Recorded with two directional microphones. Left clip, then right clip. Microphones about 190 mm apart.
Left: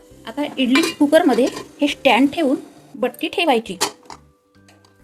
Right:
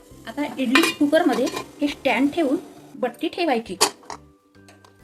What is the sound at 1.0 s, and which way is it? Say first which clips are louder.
A woman's voice: left 5 dB; 40° left (ahead or behind).